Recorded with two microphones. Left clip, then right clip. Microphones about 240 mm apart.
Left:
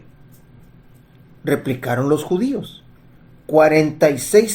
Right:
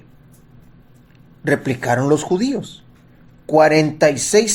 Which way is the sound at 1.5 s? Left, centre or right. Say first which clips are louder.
Right 3 dB; right.